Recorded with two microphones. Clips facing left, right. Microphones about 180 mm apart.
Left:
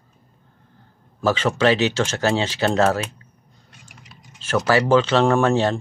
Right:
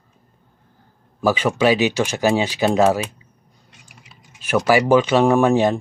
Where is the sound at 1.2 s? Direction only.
10° right (ahead or behind).